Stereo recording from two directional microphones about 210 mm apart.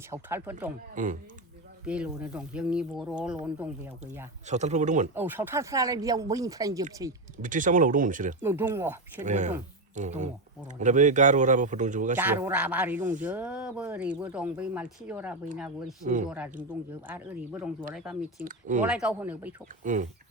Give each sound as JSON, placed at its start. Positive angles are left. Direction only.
{"t": 0.1, "sound": "speech", "side_deg": -10}
{"t": 0.9, "sound": "speech", "side_deg": -40}
{"t": 1.8, "sound": "speech", "side_deg": -5}
{"t": 4.4, "sound": "speech", "side_deg": -35}
{"t": 5.1, "sound": "speech", "side_deg": -10}
{"t": 7.4, "sound": "speech", "side_deg": -40}
{"t": 8.4, "sound": "speech", "side_deg": -10}
{"t": 9.1, "sound": "speech", "side_deg": -35}
{"t": 12.1, "sound": "speech", "side_deg": -10}
{"t": 17.1, "sound": "speech", "side_deg": -10}
{"t": 18.3, "sound": "speech", "side_deg": -40}
{"t": 18.8, "sound": "speech", "side_deg": -5}
{"t": 19.8, "sound": "speech", "side_deg": -35}